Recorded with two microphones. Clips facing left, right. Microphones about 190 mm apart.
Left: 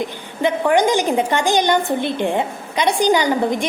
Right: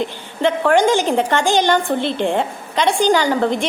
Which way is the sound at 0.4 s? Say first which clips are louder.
Right 1 dB; 15° left (ahead or behind).